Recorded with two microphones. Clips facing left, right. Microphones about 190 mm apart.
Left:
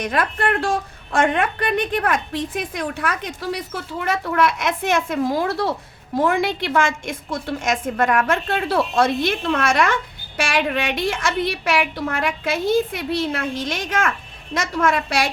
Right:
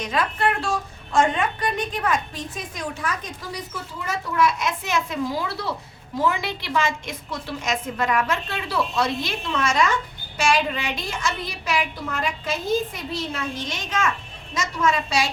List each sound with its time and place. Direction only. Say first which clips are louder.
0.0 s a woman's voice: left 2 dB; 55° left (ahead or behind)